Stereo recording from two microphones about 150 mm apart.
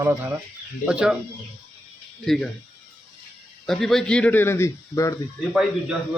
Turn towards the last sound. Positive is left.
turn(degrees=-5)  # may be behind; listen again after turning